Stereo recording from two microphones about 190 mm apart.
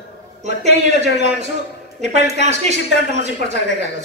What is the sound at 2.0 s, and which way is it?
A woman's voice, 35° right (ahead or behind).